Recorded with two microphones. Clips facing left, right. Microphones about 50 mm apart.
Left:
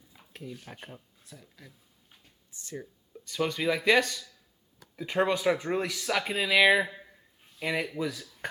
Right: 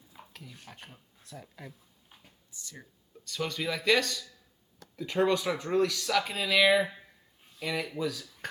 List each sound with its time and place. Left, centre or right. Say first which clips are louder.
0.6 s speech: left 4 dB; centre
1.4 s a sound: right 7 dB; centre
2.5 s speech: right 1 dB; left
3.2 s speech: left 5 dB; centre
4.8 s a sound: even; centre
5.2 s speech: left 1 dB; centre